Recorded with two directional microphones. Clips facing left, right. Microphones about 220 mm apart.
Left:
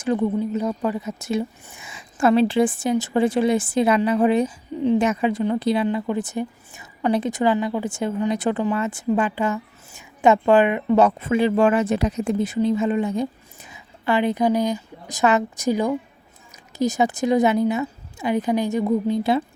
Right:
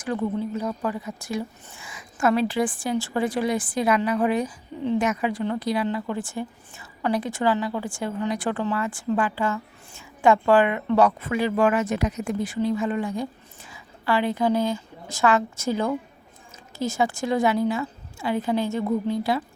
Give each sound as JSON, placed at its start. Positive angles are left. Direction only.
{"t": 0.0, "sound": "a woman's voice", "side_deg": 20}